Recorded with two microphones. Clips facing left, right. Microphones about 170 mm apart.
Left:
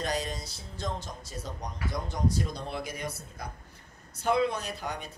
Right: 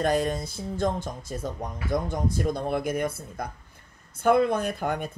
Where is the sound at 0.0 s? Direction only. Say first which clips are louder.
Right 8 dB; 55° right (ahead or behind).